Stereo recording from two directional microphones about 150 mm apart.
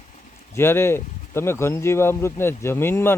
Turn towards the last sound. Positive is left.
turn(degrees=15)  # may be behind; listen again after turning